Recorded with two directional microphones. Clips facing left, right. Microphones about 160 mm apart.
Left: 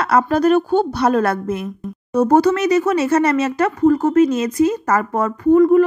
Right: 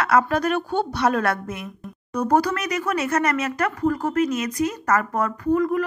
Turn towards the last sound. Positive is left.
turn(degrees=25)  # may be behind; listen again after turning